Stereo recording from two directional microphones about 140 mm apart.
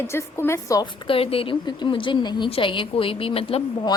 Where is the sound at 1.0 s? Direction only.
40° left (ahead or behind).